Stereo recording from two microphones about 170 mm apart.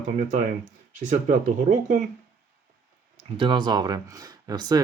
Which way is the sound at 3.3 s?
30° right (ahead or behind).